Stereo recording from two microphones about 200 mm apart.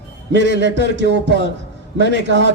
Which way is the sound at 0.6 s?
60° right (ahead or behind).